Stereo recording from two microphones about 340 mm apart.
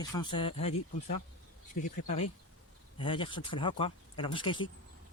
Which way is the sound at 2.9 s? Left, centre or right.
Centre.